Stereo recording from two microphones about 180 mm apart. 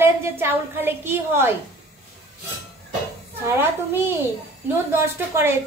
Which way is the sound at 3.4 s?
10° right (ahead or behind).